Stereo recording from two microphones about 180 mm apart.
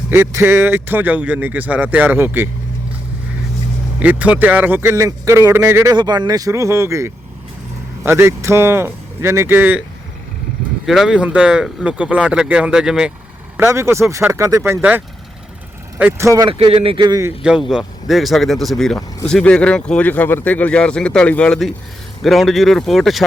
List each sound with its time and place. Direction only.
0.1 s speech: 15° right (ahead or behind)
4.0 s speech: 10° right (ahead or behind)
10.8 s speech: centre (ahead or behind)
13.6 s speech: 15° right (ahead or behind)
16.5 s a man's voice: 30° right (ahead or behind)
17.7 s speech: centre (ahead or behind)